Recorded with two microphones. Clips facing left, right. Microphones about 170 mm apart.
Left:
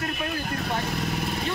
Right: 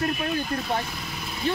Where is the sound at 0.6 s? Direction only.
55° left (ahead or behind).